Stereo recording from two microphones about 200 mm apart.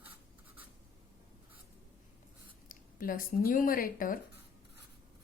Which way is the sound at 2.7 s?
45° left (ahead or behind).